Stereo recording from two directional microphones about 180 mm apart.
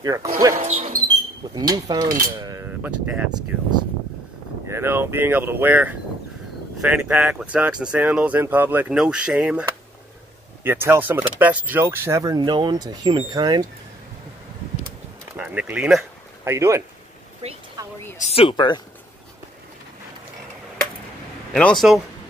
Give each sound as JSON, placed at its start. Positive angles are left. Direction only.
{"t": 0.0, "sound": "speech", "side_deg": -20}
{"t": 0.6, "sound": "speech", "side_deg": -35}
{"t": 1.7, "sound": "speech", "side_deg": -20}
{"t": 2.1, "sound": "cutlery", "side_deg": -20}
{"t": 3.3, "sound": "speech", "side_deg": -25}
{"t": 15.3, "sound": "speech", "side_deg": -10}
{"t": 17.4, "sound": "speech", "side_deg": -35}
{"t": 17.8, "sound": "a sound", "side_deg": -20}
{"t": 18.1, "sound": "speech", "side_deg": 35}
{"t": 21.5, "sound": "a man's voice", "side_deg": 5}